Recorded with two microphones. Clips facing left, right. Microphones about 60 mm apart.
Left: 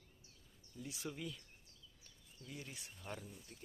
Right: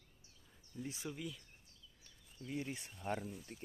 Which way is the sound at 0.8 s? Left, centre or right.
Right.